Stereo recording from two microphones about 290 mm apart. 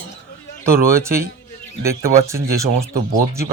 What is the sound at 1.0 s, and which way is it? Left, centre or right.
Speech, centre.